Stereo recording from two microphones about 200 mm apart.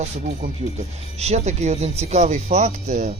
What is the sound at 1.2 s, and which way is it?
Speech, 35° right (ahead or behind).